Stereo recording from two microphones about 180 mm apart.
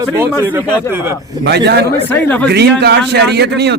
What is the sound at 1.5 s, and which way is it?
Speech, 65° right (ahead or behind).